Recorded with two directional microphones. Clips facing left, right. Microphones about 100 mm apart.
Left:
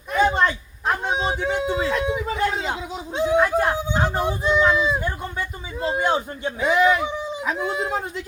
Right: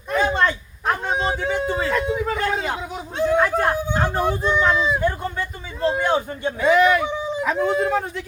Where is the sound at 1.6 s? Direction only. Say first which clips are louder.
Right 1 dB; 50° right (ahead or behind).